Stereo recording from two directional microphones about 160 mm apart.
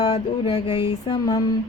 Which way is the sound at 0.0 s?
35° left (ahead or behind).